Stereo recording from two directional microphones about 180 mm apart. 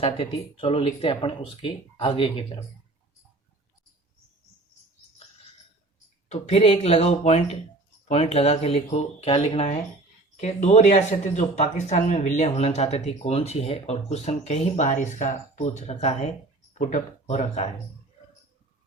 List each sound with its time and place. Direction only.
0.0 s speech: 35° left (ahead or behind)
6.2 s speech: 35° left (ahead or behind)